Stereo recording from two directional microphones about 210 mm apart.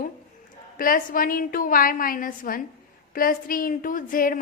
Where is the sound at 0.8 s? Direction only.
40° left (ahead or behind).